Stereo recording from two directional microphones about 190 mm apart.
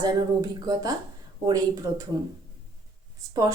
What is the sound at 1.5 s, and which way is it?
Speech, 20° right (ahead or behind).